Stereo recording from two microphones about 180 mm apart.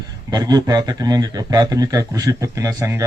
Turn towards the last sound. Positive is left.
turn(degrees=-15)  # may be behind; listen again after turning